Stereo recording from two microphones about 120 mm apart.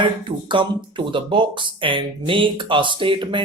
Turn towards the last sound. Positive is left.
turn(degrees=-45)  # may be behind; listen again after turning